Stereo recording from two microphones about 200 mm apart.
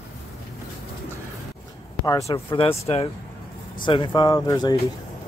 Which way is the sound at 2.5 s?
30° left (ahead or behind).